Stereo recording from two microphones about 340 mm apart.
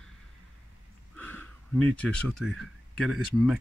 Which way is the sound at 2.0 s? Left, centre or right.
Centre.